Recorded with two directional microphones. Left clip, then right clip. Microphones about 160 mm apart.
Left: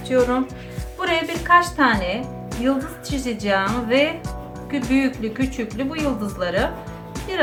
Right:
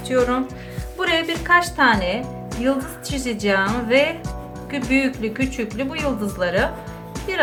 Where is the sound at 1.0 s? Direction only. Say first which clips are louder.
Right 1 dB; 45° right (ahead or behind).